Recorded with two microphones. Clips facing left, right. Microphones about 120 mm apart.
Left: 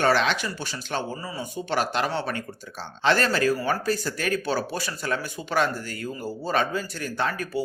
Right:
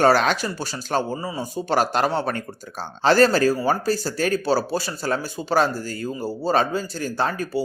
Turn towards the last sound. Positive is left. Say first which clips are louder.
# right 3 dB
turn(degrees=-30)  # may be behind; listen again after turning